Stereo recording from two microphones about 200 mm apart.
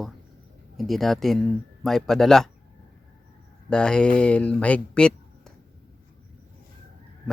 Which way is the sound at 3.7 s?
5° left (ahead or behind).